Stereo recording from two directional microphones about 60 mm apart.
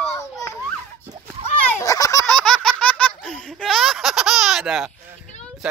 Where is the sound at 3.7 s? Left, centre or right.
Centre.